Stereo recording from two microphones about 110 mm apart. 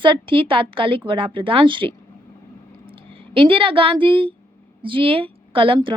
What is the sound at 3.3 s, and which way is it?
Speech, 55° right (ahead or behind).